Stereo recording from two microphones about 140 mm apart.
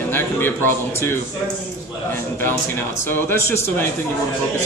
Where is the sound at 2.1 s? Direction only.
15° left (ahead or behind).